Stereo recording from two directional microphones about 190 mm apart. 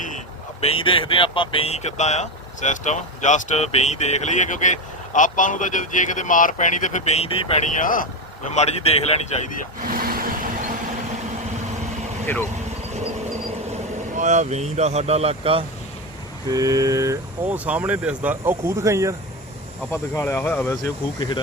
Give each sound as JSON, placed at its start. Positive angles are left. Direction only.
{"t": 0.6, "sound": "speech", "side_deg": 30}
{"t": 7.8, "sound": "speech", "side_deg": 45}
{"t": 8.5, "sound": "speech", "side_deg": 35}
{"t": 9.8, "sound": "vehicle", "side_deg": -50}
{"t": 12.2, "sound": "speech", "side_deg": 10}
{"t": 13.7, "sound": "speech", "side_deg": -40}
{"t": 16.5, "sound": "speech", "side_deg": -20}
{"t": 19.9, "sound": "speech", "side_deg": 10}